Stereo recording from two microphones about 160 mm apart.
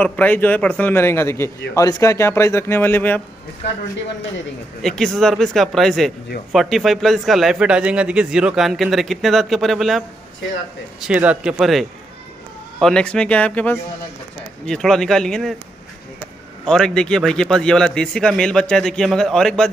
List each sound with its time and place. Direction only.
0.0 s a man's voice: 10° left (ahead or behind)
4.8 s a man's voice: centre (ahead or behind)
11.1 s a man's voice: 5° right (ahead or behind)
12.8 s a man's voice: 5° left (ahead or behind)
16.6 s a man's voice: 5° left (ahead or behind)